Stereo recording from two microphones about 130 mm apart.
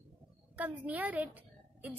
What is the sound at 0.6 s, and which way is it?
A woman's voice, 10° right (ahead or behind).